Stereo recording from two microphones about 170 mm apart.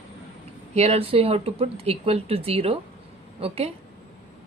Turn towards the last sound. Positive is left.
turn(degrees=-35)  # may be behind; listen again after turning